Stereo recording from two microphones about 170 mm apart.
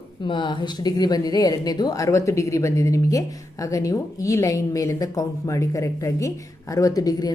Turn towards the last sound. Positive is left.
turn(degrees=20)  # may be behind; listen again after turning